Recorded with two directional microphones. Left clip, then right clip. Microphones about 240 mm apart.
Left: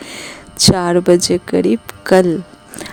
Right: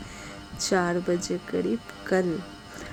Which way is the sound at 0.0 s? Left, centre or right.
Left.